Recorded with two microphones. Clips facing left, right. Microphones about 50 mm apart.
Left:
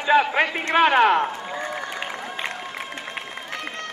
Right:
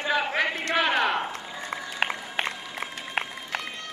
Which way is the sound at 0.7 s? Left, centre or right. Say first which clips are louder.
Left 8 dB; left.